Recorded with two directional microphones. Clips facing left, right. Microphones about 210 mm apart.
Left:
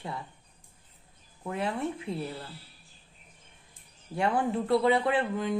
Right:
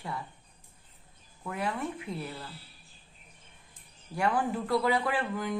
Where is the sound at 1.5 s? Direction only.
25° left (ahead or behind).